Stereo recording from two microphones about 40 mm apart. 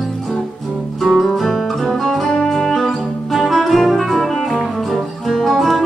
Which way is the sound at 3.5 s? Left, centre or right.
Centre.